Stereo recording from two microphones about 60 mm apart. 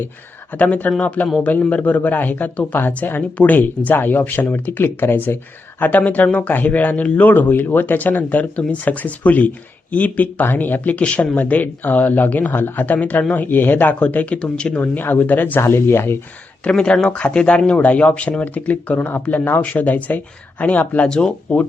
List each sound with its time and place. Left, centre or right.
0.5 s speech: left
5.8 s speech: left
14.0 s speech: left
14.8 s speech: left
15.6 s speech: left
16.6 s speech: centre
21.1 s speech: centre